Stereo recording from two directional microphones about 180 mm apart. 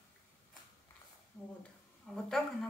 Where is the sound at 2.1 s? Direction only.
Centre (ahead or behind).